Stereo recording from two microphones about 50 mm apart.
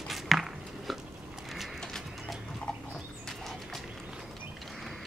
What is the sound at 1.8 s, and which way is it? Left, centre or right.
Horse, centre.